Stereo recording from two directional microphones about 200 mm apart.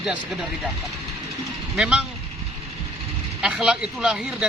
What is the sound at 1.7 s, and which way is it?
Speech, 5° right (ahead or behind).